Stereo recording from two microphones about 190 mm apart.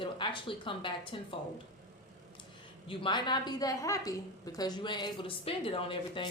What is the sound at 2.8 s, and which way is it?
A woman's voice, 25° left (ahead or behind).